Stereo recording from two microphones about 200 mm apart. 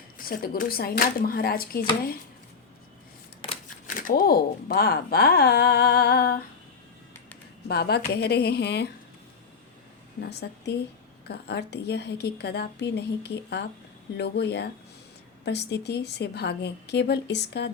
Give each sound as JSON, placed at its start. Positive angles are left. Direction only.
{"t": 0.2, "sound": "speech", "side_deg": 45}
{"t": 3.4, "sound": "a sound", "side_deg": 25}
{"t": 3.8, "sound": "speech", "side_deg": 45}
{"t": 7.7, "sound": "speech", "side_deg": 55}
{"t": 10.2, "sound": "a woman's voice", "side_deg": 55}